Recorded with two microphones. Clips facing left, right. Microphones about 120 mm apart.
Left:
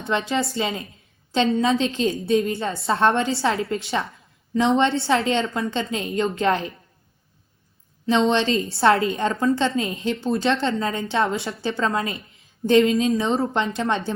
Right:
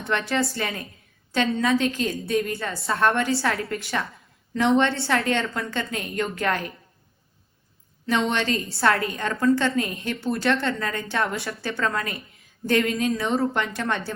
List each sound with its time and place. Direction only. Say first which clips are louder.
0.0 s a woman's voice: left 1 dB; 25° left (ahead or behind)
8.0 s a woman's voice: left 4 dB; 20° left (ahead or behind)